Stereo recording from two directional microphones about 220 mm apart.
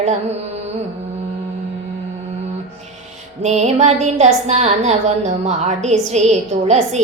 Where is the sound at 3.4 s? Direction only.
30° right (ahead or behind).